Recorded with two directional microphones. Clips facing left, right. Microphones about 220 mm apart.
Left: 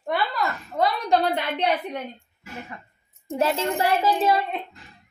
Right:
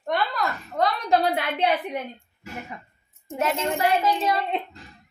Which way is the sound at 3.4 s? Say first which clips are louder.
Left 1 dB; 30° left (ahead or behind).